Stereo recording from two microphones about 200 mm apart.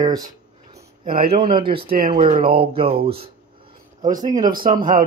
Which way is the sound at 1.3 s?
25° right (ahead or behind).